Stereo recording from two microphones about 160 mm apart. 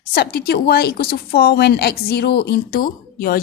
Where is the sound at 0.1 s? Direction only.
75° left (ahead or behind).